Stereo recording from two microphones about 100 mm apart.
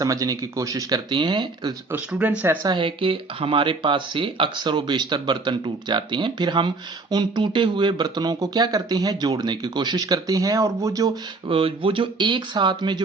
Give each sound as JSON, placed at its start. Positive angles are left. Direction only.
{"t": 0.0, "sound": "speech", "side_deg": -35}
{"t": 1.9, "sound": "speech", "side_deg": -15}
{"t": 2.6, "sound": "speech", "side_deg": -55}
{"t": 11.4, "sound": "speech", "side_deg": -65}